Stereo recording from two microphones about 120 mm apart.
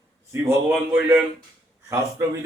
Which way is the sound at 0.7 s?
15° right (ahead or behind).